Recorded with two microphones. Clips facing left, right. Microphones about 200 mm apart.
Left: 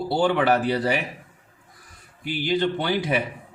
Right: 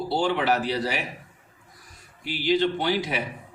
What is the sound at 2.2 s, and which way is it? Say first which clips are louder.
Speech: even; 50° left (ahead or behind).